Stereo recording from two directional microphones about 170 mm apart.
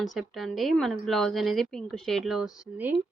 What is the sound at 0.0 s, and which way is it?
Speech, centre (ahead or behind).